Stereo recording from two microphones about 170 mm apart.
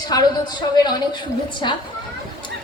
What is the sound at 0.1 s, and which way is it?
A woman's voice, 25° left (ahead or behind).